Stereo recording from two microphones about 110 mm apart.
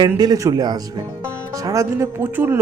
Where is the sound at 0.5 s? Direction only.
35° right (ahead or behind).